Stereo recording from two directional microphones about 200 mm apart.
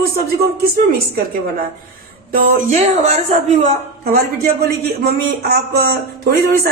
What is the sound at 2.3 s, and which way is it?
A woman's voice, 35° right (ahead or behind).